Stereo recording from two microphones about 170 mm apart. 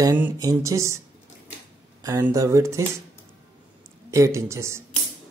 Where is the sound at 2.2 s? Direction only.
15° right (ahead or behind).